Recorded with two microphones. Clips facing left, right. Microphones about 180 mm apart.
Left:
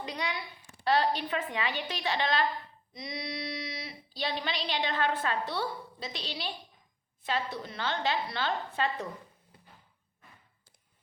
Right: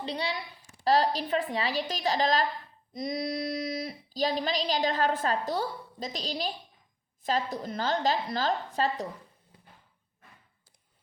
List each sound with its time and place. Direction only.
0.0 s a woman's voice: 30° right (ahead or behind)